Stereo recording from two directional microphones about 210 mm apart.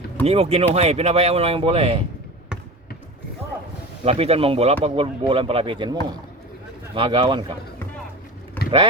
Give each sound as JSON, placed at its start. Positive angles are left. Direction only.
{"t": 0.3, "sound": "speech", "side_deg": -30}
{"t": 4.0, "sound": "speech", "side_deg": -30}